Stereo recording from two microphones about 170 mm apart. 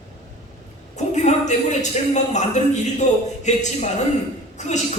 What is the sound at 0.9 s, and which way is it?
A man's voice, 45° left (ahead or behind).